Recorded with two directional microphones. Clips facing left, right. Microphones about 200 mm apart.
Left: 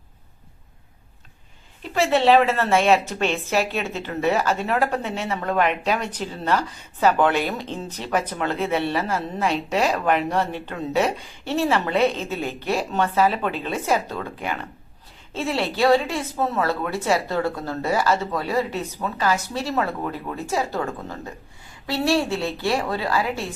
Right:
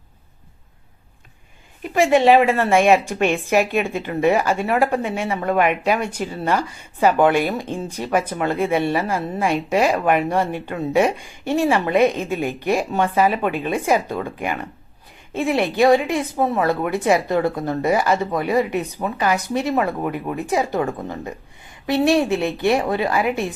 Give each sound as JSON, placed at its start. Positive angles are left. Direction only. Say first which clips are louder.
{"t": 1.8, "sound": "a woman's voice", "louder": "right 4 dB", "side_deg": -15}